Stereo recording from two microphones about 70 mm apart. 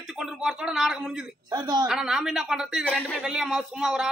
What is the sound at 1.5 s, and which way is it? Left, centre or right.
Speech, right.